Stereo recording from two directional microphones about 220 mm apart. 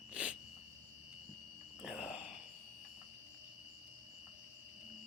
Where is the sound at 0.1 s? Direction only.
5° right (ahead or behind).